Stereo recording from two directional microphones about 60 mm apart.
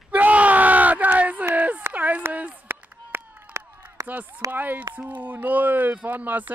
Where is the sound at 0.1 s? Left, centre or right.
Right.